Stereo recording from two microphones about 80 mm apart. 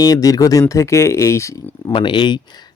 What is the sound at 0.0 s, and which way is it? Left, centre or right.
Speech, left.